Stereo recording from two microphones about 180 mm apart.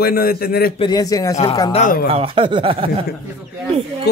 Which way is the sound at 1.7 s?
45° left (ahead or behind).